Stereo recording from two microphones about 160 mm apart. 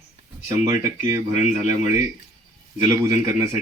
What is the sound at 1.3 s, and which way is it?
Speech, 45° left (ahead or behind).